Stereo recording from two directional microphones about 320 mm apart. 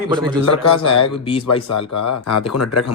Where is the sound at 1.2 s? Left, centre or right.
Centre.